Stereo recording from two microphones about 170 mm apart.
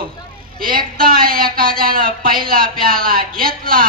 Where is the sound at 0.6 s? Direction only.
55° right (ahead or behind).